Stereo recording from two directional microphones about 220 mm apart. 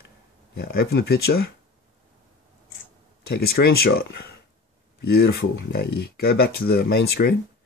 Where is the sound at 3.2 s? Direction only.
45° left (ahead or behind).